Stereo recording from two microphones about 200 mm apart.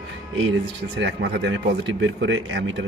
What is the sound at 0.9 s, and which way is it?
Speech, 60° right (ahead or behind).